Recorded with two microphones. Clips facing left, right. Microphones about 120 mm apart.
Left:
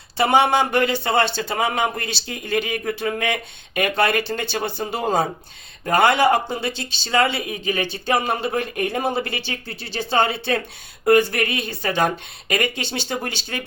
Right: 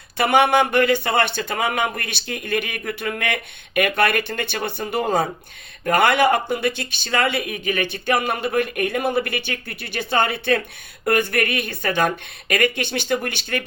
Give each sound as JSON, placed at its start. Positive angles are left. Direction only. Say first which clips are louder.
{"t": 0.2, "sound": "speech", "louder": "even", "side_deg": 25}